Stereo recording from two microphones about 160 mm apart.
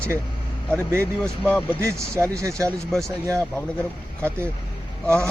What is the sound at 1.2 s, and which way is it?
Speech, 5° left (ahead or behind).